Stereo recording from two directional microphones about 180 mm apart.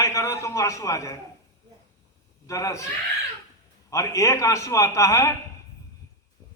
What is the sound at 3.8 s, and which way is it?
A man's voice, 15° left (ahead or behind).